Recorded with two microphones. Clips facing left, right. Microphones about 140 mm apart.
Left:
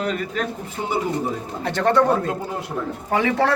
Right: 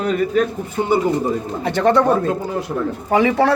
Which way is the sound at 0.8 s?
70° right (ahead or behind).